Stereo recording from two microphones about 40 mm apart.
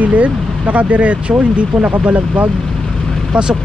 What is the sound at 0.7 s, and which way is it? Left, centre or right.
Speech, right.